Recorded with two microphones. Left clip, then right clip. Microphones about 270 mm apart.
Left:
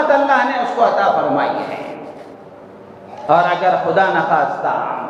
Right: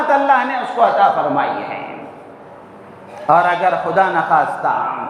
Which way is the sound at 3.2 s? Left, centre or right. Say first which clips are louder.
Even; right.